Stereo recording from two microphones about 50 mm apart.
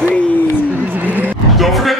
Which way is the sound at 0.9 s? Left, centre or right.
Right.